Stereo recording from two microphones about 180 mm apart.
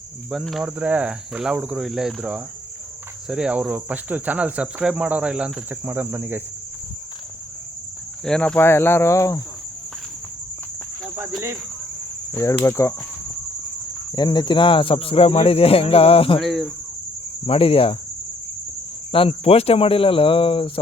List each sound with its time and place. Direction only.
0.3 s cricket: centre (ahead or behind)
8.2 s speech: 5° left (ahead or behind)
11.2 s speech: 15° right (ahead or behind)
12.3 s speech: 15° left (ahead or behind)
14.1 s speech: 25° left (ahead or behind)
16.4 s cricket: centre (ahead or behind)
17.4 s speech: 30° left (ahead or behind)
19.1 s speech: 30° left (ahead or behind)